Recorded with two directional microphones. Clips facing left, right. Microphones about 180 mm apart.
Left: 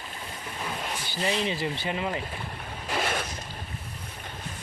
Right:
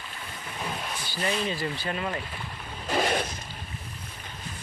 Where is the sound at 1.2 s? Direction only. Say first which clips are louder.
Left 1 dB; 20° left (ahead or behind).